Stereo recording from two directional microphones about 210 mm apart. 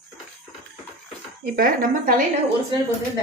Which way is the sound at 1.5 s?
40° right (ahead or behind).